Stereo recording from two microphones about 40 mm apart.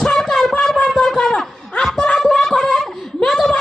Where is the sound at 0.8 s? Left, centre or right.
Centre.